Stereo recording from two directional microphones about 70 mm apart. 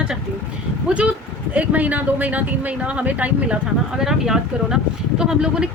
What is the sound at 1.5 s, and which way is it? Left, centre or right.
Speech, right.